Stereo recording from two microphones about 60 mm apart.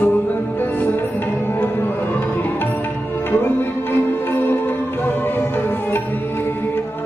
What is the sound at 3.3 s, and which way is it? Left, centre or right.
Music, left.